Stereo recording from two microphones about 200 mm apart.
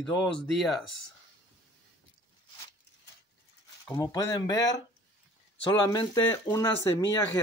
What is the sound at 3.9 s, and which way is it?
Speech, 20° left (ahead or behind).